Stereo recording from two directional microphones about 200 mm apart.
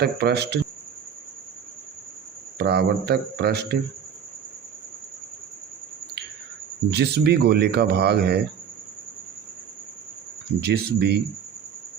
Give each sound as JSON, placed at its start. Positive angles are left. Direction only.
{"t": 0.0, "sound": "speech", "side_deg": -55}
{"t": 2.6, "sound": "speech", "side_deg": -55}
{"t": 6.9, "sound": "speech", "side_deg": -55}
{"t": 10.6, "sound": "speech", "side_deg": -55}